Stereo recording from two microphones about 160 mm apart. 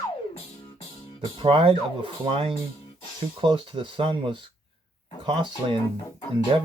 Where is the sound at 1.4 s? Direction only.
30° right (ahead or behind).